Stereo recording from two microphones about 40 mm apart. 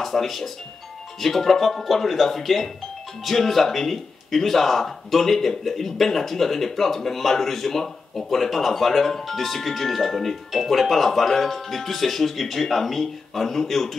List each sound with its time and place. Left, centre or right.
0.0 s speech: centre